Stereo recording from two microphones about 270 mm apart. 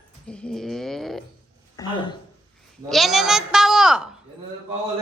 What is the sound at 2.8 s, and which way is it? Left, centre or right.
A woman's voice, centre.